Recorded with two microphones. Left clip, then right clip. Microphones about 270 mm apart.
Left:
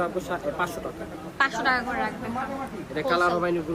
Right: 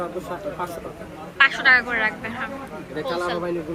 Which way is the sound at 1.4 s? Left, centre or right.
Centre.